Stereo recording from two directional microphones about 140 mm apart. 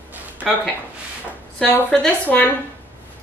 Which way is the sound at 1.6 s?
10° left (ahead or behind).